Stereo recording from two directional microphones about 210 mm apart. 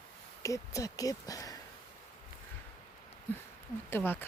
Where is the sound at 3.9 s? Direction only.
10° left (ahead or behind).